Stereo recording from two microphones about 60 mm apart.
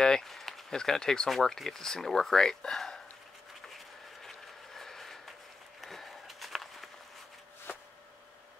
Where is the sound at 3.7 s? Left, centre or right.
Centre.